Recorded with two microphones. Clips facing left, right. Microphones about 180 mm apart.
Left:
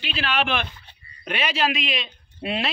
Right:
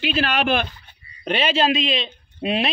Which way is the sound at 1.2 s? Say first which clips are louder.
Right 5 dB; 30° right (ahead or behind).